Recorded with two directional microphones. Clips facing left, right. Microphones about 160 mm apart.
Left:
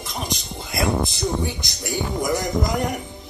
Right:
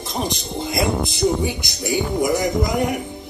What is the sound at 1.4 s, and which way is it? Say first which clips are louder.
Speech: right 5 dB; 10° right (ahead or behind).